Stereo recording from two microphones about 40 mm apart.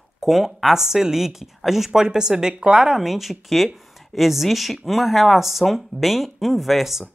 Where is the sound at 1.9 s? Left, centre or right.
Centre.